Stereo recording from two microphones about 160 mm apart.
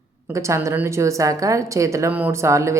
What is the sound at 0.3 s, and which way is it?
A woman's voice, 20° right (ahead or behind).